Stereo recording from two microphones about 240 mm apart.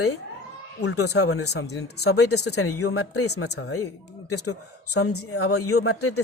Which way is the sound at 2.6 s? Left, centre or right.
Left.